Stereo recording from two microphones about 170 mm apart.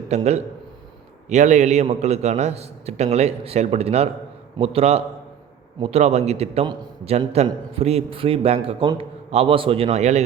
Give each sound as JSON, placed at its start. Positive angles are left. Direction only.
{"t": 0.1, "sound": "a man's voice", "side_deg": -40}